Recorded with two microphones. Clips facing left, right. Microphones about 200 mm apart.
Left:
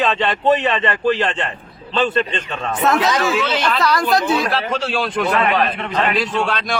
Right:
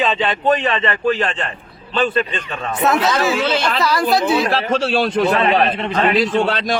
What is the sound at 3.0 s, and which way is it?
Speech, 15° left (ahead or behind).